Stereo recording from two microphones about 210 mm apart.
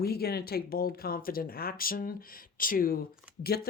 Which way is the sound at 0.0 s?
50° left (ahead or behind).